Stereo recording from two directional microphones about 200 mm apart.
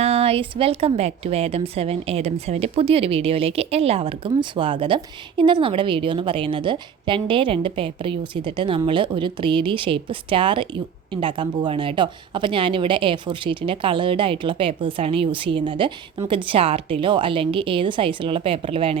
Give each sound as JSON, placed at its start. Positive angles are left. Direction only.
{"t": 0.0, "sound": "speech", "side_deg": -30}